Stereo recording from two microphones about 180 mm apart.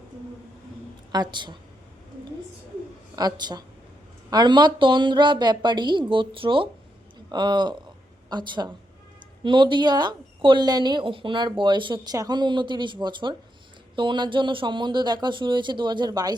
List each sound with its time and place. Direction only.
1.1 s speech: 25° right (ahead or behind)
3.2 s a man's voice: 25° right (ahead or behind)